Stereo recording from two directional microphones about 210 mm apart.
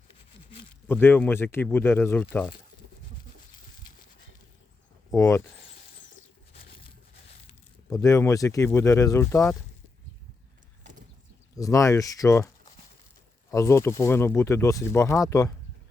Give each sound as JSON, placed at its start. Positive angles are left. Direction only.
{"t": 0.9, "sound": "speech", "side_deg": 10}
{"t": 5.1, "sound": "speech", "side_deg": 15}
{"t": 7.9, "sound": "speech", "side_deg": 15}
{"t": 11.5, "sound": "speech", "side_deg": 15}
{"t": 13.5, "sound": "speech", "side_deg": 15}